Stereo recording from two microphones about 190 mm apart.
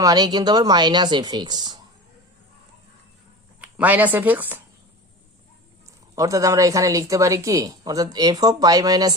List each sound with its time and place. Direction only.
0.0 s speech: 20° right (ahead or behind)
3.6 s speech: 10° right (ahead or behind)
6.1 s speech: 15° right (ahead or behind)